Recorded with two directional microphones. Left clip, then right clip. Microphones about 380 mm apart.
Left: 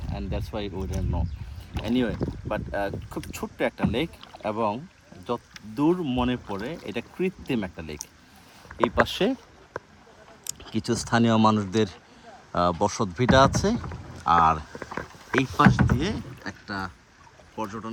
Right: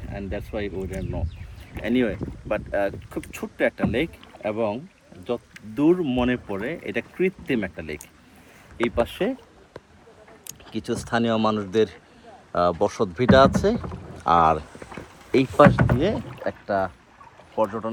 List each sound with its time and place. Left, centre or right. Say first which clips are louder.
0.1 s speech: right 3 dB; centre
9.0 s speech: left 1 dB; left
10.4 s speech: left 1 dB; centre